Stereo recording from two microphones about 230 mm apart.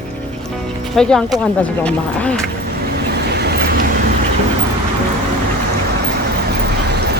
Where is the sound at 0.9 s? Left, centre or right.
Centre.